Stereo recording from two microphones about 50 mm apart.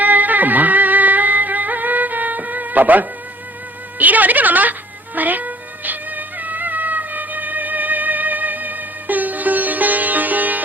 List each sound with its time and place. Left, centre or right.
0.0 s music: right
3.9 s a woman's voice: right
5.1 s music: right